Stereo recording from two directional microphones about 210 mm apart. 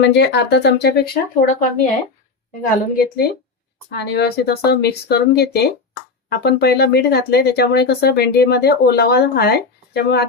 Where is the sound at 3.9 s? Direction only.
50° left (ahead or behind).